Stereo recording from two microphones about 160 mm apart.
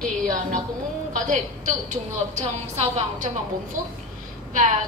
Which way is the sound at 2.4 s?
45° right (ahead or behind).